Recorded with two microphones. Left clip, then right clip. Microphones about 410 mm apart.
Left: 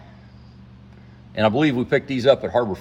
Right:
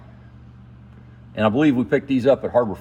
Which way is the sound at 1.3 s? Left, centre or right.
Centre.